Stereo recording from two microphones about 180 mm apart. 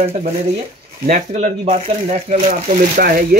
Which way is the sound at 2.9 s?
55° right (ahead or behind).